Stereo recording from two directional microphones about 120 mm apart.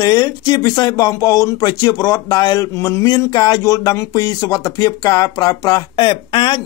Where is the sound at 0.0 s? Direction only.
35° left (ahead or behind).